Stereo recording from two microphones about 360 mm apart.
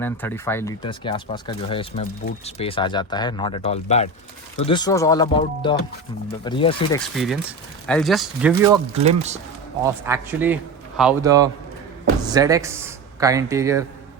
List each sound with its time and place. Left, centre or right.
0.0 s speech: centre
7.9 s a man's voice: centre
9.0 s speech: centre
9.8 s a man's voice: centre